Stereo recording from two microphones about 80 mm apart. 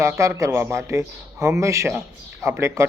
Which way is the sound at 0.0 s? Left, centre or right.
Right.